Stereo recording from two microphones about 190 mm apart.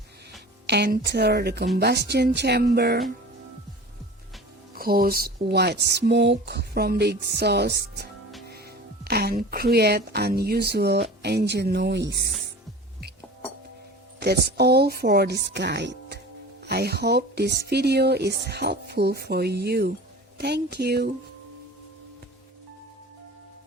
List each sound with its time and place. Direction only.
0.7 s speech: 60° right (ahead or behind)
4.7 s speech: 50° right (ahead or behind)
14.2 s speech: 60° right (ahead or behind)